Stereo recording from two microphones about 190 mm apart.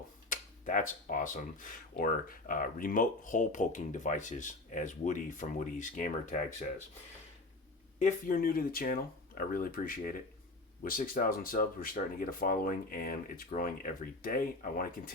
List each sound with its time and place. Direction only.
0.3 s speech: 45° left (ahead or behind)
7.9 s speech: 45° left (ahead or behind)